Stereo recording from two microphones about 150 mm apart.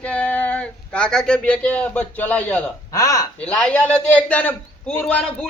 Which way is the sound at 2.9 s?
20° left (ahead or behind).